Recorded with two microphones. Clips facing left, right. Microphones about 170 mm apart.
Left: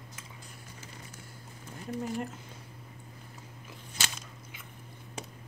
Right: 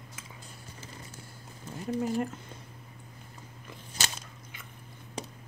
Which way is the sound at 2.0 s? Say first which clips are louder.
Right 5 dB; centre (ahead or behind).